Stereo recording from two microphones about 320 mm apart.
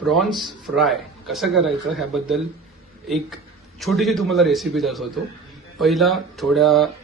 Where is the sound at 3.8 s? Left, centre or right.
Centre.